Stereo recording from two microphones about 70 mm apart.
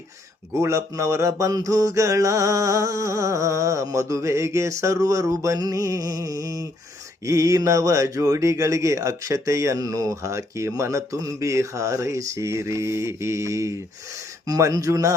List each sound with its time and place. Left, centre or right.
0.5 s speech: right
14.4 s speech: right